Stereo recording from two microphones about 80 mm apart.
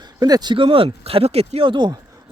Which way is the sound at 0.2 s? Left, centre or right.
Right.